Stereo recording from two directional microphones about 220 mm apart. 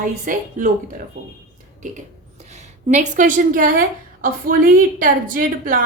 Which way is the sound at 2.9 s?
35° right (ahead or behind).